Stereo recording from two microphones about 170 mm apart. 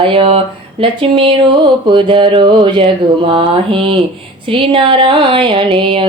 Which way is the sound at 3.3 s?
30° right (ahead or behind).